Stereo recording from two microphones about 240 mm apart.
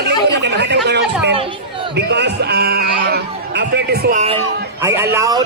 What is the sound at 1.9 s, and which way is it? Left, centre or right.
Speech, right.